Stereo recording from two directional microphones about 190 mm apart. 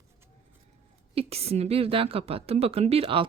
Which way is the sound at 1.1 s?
30° right (ahead or behind).